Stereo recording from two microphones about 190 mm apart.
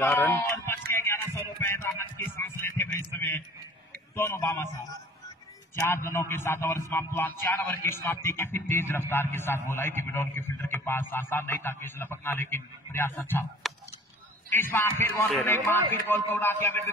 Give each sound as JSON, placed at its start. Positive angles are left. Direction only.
{"t": 0.0, "sound": "a man's voice", "side_deg": 10}
{"t": 0.9, "sound": "music", "side_deg": 15}
{"t": 4.1, "sound": "a man's voice", "side_deg": 15}
{"t": 5.9, "sound": "a man's voice", "side_deg": 15}
{"t": 14.5, "sound": "a man's voice", "side_deg": 10}